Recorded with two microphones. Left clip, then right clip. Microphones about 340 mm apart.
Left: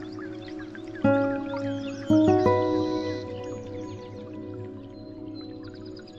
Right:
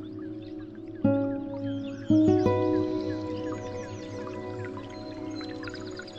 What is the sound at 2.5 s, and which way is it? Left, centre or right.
Music, centre.